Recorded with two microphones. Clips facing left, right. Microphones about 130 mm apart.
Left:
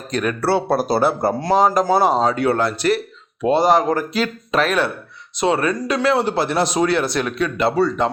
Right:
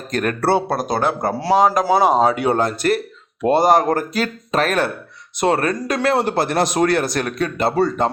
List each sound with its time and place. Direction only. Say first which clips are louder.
0.1 s speech: right 1 dB; 45° right (ahead or behind)
0.7 s speech: left 3 dB; 5° left (ahead or behind)
1.4 s speech: right 2 dB; 5° right (ahead or behind)
2.6 s speech: even; 45° right (ahead or behind)